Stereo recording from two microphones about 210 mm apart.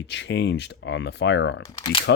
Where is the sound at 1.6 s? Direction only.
25° left (ahead or behind).